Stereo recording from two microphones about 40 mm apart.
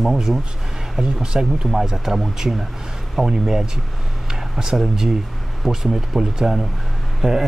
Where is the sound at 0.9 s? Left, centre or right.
Centre.